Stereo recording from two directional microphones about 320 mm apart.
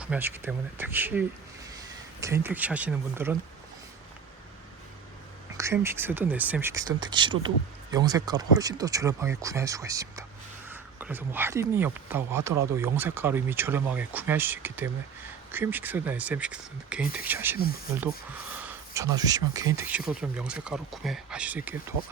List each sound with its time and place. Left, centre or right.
0.0 s speech: centre
2.2 s speech: centre
5.5 s speech: centre
18.6 s speech: centre